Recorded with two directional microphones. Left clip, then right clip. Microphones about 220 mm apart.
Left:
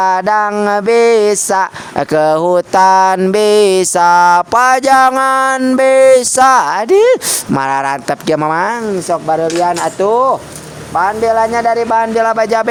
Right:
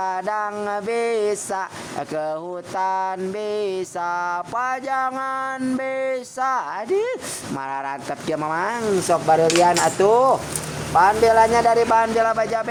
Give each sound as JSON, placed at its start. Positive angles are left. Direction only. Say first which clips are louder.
{"t": 0.0, "sound": "music", "louder": "left 12 dB", "side_deg": 50}
{"t": 9.0, "sound": "music", "louder": "left 3 dB", "side_deg": 30}